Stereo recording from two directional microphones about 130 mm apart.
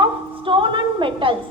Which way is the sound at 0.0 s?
40° right (ahead or behind).